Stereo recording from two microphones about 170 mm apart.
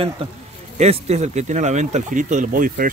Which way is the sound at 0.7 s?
40° right (ahead or behind).